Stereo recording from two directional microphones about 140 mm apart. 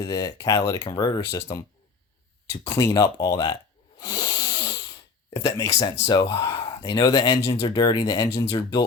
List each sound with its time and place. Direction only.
0.0 s speech: 25° left (ahead or behind)
4.0 s a sound: 30° left (ahead or behind)
5.3 s speech: 25° left (ahead or behind)
7.7 s speech: 30° left (ahead or behind)